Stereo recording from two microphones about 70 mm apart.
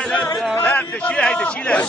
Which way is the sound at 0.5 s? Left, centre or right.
Left.